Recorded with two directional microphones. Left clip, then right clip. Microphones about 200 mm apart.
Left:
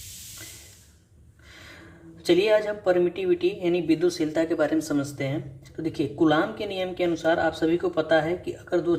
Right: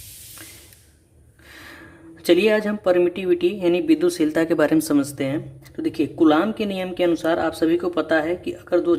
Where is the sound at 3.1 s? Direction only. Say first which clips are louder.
Right 4 dB; 45° right (ahead or behind).